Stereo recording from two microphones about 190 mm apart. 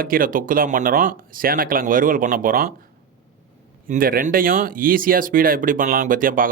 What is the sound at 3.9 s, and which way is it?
Speech, 50° right (ahead or behind).